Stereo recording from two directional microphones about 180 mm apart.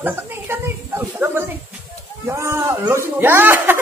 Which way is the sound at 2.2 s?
15° right (ahead or behind).